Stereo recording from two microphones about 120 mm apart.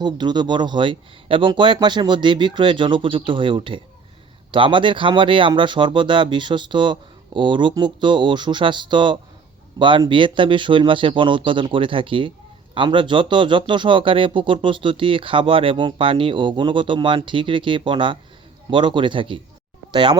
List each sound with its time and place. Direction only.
0.0 s speech: 35° right (ahead or behind)